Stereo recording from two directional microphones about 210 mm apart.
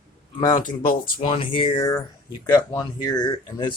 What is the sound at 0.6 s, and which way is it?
Speech, 45° left (ahead or behind).